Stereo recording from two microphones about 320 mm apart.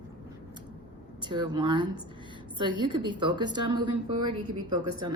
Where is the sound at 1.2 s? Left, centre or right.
Centre.